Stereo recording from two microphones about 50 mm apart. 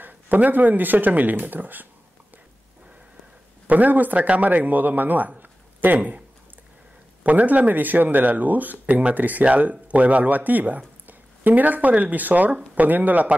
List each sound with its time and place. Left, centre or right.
0.0 s speech: right
3.6 s speech: right
5.4 s a sound: right
7.2 s speech: right